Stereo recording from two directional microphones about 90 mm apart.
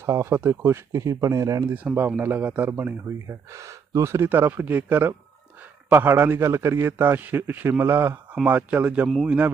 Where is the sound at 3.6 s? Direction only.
30° right (ahead or behind).